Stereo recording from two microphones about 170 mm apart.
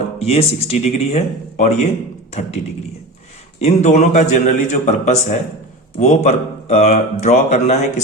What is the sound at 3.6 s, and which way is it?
Speech, 40° left (ahead or behind).